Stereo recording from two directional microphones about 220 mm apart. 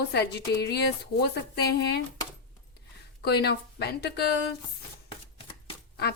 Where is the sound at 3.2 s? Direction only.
50° left (ahead or behind).